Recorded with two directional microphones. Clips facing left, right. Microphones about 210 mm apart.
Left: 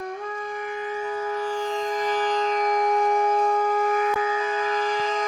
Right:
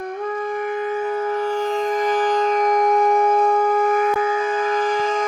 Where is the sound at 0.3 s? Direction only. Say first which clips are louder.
Right 7 dB; 55° right (ahead or behind).